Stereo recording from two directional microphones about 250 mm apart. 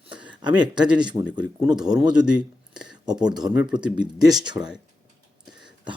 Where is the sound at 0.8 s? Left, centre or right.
Centre.